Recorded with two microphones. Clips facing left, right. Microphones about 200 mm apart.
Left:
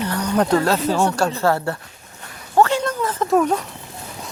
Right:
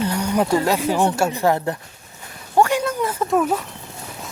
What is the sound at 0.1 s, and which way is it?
Speech, 10° right (ahead or behind).